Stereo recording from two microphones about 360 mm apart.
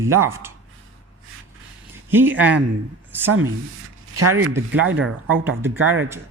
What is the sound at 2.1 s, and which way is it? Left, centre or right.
Speech, centre.